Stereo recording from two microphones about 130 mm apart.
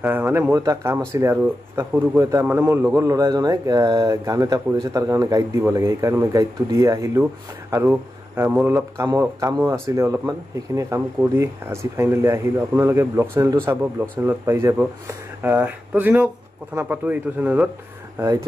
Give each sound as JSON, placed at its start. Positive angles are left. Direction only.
{"t": 0.0, "sound": "speech", "side_deg": -15}
{"t": 15.4, "sound": "speech", "side_deg": -10}
{"t": 18.1, "sound": "speech", "side_deg": -25}